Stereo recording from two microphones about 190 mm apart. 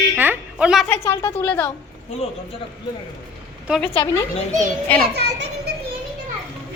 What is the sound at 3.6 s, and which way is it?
Speech, centre (ahead or behind).